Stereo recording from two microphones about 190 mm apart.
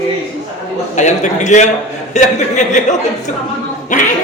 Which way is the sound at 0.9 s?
40° left (ahead or behind).